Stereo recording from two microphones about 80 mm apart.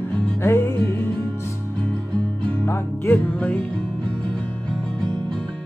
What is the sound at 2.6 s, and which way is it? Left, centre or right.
Music, left.